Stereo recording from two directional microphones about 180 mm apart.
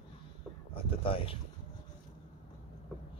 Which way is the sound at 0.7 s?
30° left (ahead or behind).